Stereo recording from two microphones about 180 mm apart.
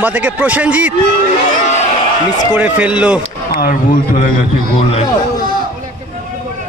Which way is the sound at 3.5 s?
50° left (ahead or behind).